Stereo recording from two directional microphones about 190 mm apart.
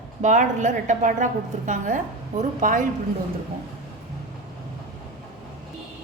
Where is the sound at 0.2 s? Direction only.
40° right (ahead or behind).